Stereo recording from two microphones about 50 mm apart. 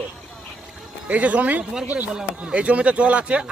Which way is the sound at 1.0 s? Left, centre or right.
Right.